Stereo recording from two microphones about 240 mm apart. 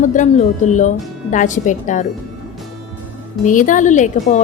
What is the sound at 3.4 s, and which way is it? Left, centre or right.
Speech, left.